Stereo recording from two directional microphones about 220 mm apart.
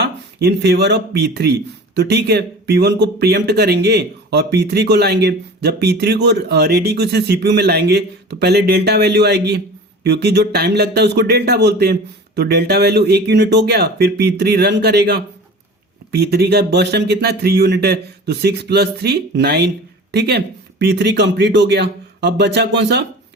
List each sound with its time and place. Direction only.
0.0 s speech: 50° right (ahead or behind)